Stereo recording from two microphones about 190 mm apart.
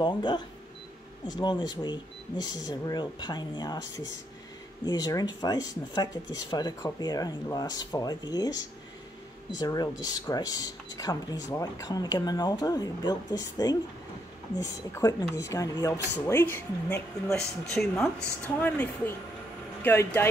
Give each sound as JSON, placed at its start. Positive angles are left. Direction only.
{"t": 0.0, "sound": "speech", "side_deg": 25}
{"t": 9.6, "sound": "speech", "side_deg": 20}
{"t": 14.6, "sound": "speech", "side_deg": 15}